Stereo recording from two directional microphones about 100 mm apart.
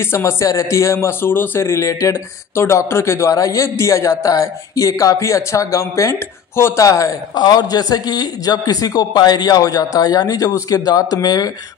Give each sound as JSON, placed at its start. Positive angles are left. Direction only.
{"t": 0.0, "sound": "speech", "side_deg": 25}